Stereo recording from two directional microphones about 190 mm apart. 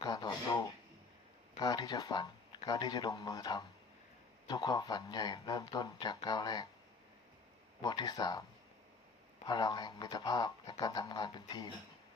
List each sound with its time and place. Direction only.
0.0 s a sound: 20° left (ahead or behind)
1.5 s speech: 20° left (ahead or behind)
7.8 s speech: 20° left (ahead or behind)
9.5 s speech: 20° left (ahead or behind)